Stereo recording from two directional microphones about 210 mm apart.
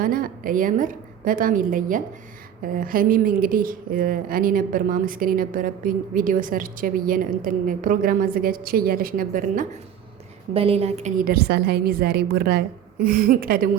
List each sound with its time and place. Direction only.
0.0 s speech: 40° right (ahead or behind)
10.5 s a woman's voice: 25° right (ahead or behind); by 13.7 s 45° right (ahead or behind)